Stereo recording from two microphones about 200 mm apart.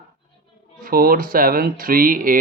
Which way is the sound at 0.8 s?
45° right (ahead or behind).